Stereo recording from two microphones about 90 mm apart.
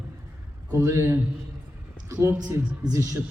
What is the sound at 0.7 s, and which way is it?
Speech, 35° right (ahead or behind).